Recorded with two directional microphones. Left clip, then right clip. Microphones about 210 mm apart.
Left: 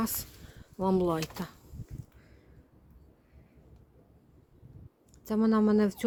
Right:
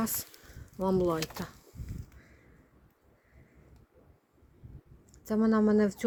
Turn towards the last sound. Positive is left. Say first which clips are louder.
# even
turn(degrees=25)  # may be behind; listen again after turning